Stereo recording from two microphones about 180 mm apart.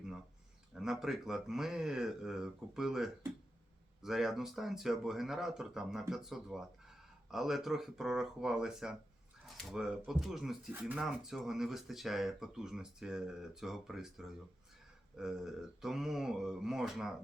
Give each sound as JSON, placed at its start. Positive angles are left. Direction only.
{"t": 0.7, "sound": "speech", "side_deg": 0}